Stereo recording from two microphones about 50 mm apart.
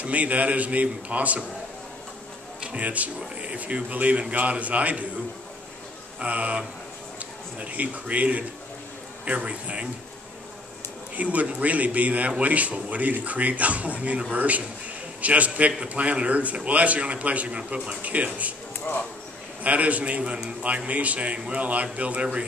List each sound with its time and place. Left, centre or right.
0.0 s a man's voice: right
2.6 s a man's voice: right
6.1 s a man's voice: right
11.1 s a man's voice: right
18.9 s speech: left
19.6 s a man's voice: right